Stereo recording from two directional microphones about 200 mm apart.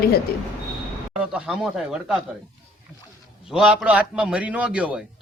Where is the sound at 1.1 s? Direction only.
5° right (ahead or behind).